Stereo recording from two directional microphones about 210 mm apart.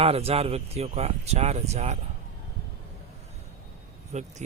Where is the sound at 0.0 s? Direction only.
30° right (ahead or behind).